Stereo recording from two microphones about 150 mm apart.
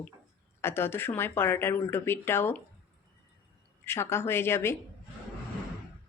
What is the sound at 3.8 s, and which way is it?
Speech, 15° left (ahead or behind).